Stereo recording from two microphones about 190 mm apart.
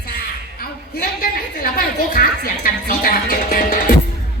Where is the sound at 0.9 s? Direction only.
50° left (ahead or behind).